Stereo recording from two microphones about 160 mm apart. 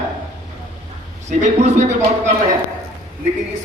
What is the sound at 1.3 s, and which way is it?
Speech, 45° right (ahead or behind).